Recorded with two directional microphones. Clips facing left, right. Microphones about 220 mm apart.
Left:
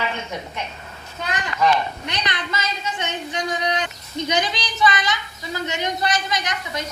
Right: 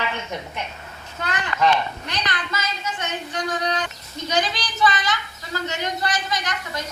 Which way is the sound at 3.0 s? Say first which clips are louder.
Left 1 dB; 15° left (ahead or behind).